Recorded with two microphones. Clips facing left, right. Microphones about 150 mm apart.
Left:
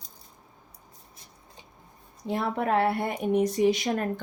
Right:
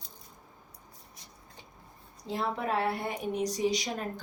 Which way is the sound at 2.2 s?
60° left (ahead or behind).